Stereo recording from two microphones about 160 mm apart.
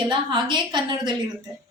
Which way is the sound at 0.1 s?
30° right (ahead or behind).